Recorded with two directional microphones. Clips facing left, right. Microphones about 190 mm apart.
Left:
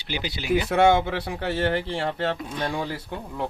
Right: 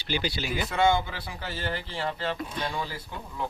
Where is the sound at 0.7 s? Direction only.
75° left (ahead or behind).